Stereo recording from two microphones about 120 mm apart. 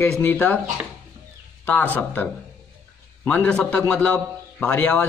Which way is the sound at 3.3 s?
10° left (ahead or behind).